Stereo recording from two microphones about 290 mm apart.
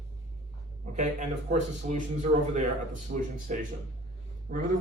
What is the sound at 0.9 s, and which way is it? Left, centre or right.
Speech, right.